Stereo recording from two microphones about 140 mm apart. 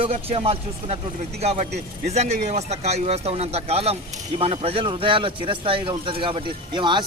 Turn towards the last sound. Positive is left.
turn(degrees=-35)  # may be behind; listen again after turning